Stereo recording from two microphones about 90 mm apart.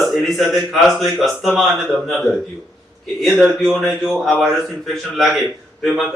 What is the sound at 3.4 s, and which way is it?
A man's voice, 5° right (ahead or behind).